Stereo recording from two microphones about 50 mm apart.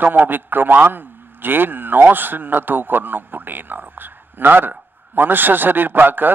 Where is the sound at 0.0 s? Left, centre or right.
Right.